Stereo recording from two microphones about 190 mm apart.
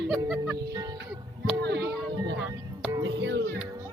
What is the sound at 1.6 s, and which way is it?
Music, 60° right (ahead or behind).